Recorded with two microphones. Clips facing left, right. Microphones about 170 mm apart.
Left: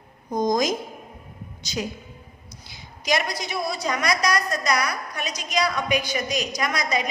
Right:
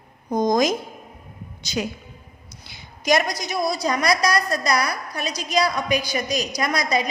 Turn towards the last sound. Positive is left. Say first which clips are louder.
# right 3 dB
turn(degrees=-35)  # may be behind; listen again after turning